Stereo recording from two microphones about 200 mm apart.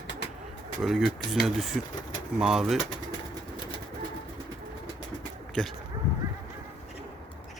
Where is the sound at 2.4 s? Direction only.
Centre (ahead or behind).